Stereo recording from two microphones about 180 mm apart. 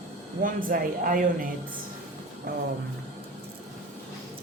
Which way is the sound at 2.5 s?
60° right (ahead or behind).